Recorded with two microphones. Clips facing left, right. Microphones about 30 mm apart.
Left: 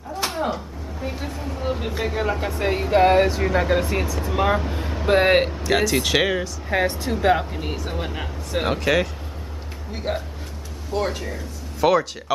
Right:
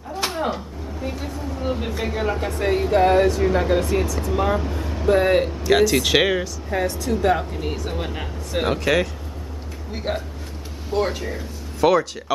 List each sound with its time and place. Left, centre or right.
0.1 s a sound: centre
1.1 s a sound: centre
1.6 s speech: centre
2.9 s speech: centre
5.0 s speech: left
5.6 s speech: centre
6.7 s speech: left; by 11.4 s centre
11.8 s speech: centre